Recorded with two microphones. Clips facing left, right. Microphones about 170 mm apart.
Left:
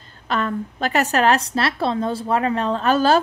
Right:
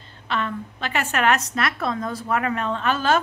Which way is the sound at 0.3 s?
40° left (ahead or behind).